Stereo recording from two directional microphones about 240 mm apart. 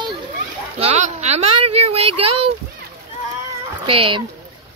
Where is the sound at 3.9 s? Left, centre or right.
Right.